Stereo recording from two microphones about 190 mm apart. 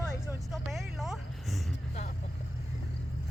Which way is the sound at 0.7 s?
Centre (ahead or behind).